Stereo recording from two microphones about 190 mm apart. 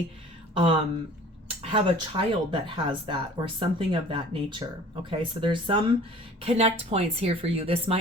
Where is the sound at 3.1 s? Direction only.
25° right (ahead or behind).